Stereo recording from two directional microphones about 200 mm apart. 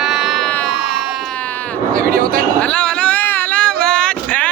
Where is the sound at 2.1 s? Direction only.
45° right (ahead or behind).